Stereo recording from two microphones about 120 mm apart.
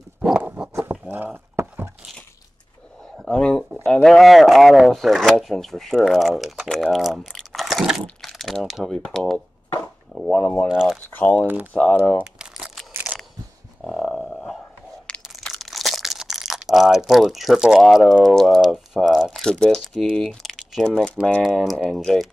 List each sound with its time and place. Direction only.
0.4 s a sound: 10° right (ahead or behind)
3.2 s a sound: 5° left (ahead or behind)
3.8 s speech: 5° left (ahead or behind)
10.1 s a sound: centre (ahead or behind)
10.4 s speech: 15° left (ahead or behind)
10.7 s speech: 5° right (ahead or behind)
11.1 s speech: 15° left (ahead or behind)
11.4 s speech: 15° right (ahead or behind)
11.7 s speech: 10° left (ahead or behind)
12.2 s crumpling: 5° right (ahead or behind)
13.1 s biting: 10° right (ahead or behind)
13.7 s a sound: 5° left (ahead or behind)
15.2 s speech: centre (ahead or behind)